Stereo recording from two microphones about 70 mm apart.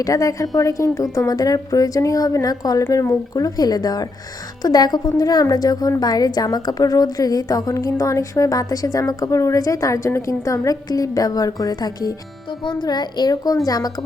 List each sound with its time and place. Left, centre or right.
0.0 s a woman's voice: left
2.8 s a woman's voice: left
12.8 s a child's voice: left